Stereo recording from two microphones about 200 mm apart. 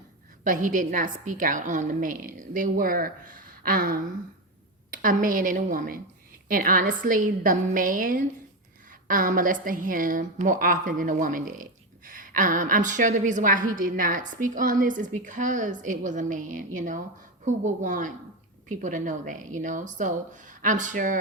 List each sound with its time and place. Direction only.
0.4 s a woman's voice: 40° right (ahead or behind)